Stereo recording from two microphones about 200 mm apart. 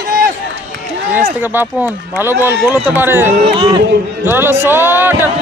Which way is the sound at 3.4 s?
25° right (ahead or behind).